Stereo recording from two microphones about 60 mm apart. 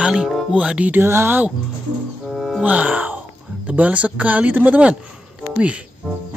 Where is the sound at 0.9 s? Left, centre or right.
Right.